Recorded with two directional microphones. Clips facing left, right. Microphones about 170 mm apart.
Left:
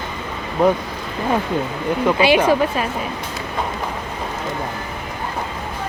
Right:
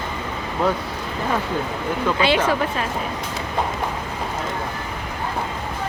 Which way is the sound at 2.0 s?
15° left (ahead or behind).